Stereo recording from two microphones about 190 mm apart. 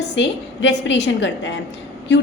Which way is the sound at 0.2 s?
70° left (ahead or behind).